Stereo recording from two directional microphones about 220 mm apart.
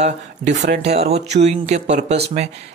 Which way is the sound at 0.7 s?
30° right (ahead or behind).